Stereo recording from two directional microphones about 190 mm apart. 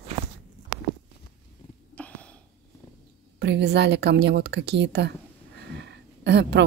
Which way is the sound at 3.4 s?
65° right (ahead or behind).